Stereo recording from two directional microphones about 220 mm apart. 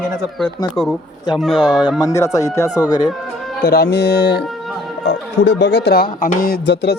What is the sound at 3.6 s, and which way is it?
Speech, 45° left (ahead or behind).